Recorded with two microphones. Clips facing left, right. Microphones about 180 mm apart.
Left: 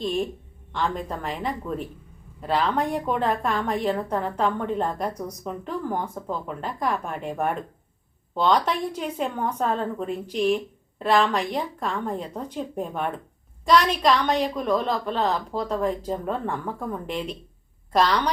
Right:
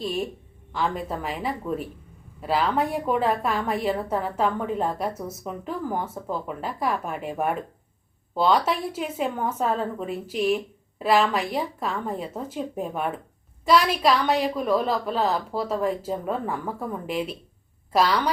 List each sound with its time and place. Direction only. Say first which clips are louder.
0.0 s a woman's voice: left 2 dB; 5° right (ahead or behind)